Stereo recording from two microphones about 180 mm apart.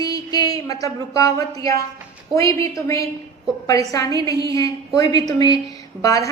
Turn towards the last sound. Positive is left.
turn(degrees=20)  # may be behind; listen again after turning